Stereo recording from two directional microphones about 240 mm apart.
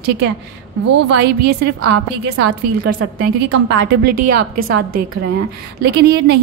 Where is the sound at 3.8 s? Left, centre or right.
Right.